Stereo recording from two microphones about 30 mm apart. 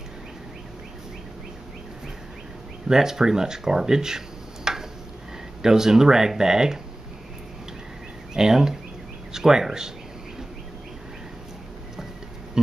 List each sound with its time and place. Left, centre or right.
2.9 s speech: centre
4.7 s a sound: centre
5.6 s speech: centre
8.4 s speech: centre